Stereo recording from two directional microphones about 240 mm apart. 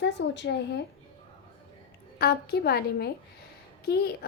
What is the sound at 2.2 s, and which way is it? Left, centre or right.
A woman's voice, left.